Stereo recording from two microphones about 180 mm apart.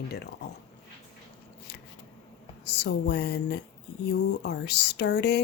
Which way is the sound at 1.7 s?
65° left (ahead or behind).